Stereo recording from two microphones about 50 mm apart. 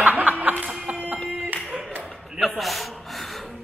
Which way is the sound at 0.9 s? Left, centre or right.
Right.